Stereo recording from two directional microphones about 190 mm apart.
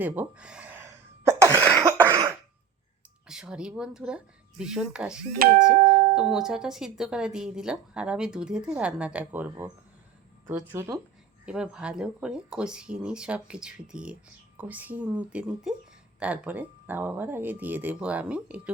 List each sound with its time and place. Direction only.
0.0 s speech: 10° right (ahead or behind)
1.3 s cough: 15° right (ahead or behind)
3.2 s speech: 5° right (ahead or behind)
5.4 s speech: 50° right (ahead or behind)
6.1 s speech: 5° right (ahead or behind)